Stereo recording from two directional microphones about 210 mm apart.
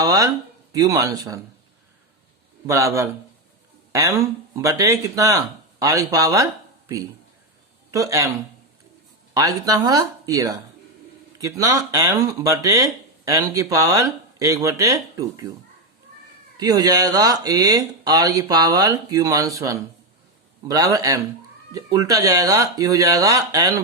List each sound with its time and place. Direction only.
0.0 s speech: 15° right (ahead or behind)
2.6 s speech: 15° right (ahead or behind)
9.3 s speech: 15° right (ahead or behind)
16.6 s speech: 15° right (ahead or behind)